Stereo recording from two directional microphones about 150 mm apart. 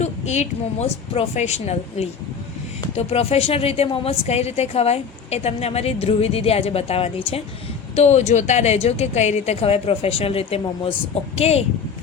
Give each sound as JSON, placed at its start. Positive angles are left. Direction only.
{"t": 0.0, "sound": "speech", "side_deg": 50}